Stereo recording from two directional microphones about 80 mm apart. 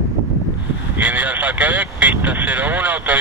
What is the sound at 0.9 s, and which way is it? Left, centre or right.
Speech, centre.